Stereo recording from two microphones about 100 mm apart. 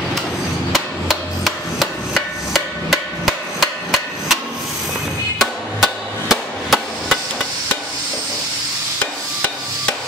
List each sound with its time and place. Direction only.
0.7 s hammer: centre (ahead or behind)
5.4 s hammer: centre (ahead or behind)